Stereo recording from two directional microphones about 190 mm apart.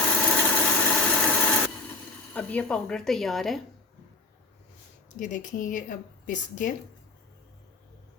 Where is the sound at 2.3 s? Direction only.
5° left (ahead or behind).